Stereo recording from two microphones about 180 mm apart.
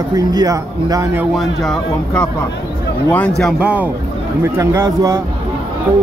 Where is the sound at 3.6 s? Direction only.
10° right (ahead or behind).